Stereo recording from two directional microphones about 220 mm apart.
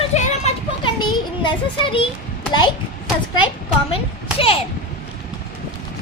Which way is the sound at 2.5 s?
20° left (ahead or behind).